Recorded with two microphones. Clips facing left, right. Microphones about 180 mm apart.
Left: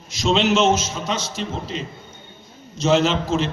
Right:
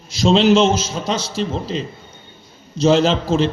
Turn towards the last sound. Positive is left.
turn(degrees=-30)  # may be behind; listen again after turning